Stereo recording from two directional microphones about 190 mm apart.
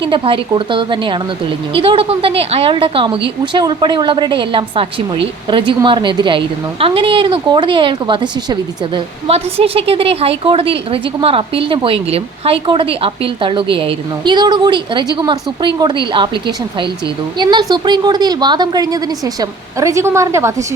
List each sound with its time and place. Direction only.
0.0 s a woman's voice: 25° right (ahead or behind)
17.3 s a woman's voice: 25° right (ahead or behind)